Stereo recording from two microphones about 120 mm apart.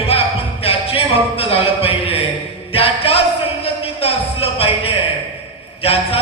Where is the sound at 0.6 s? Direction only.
55° left (ahead or behind).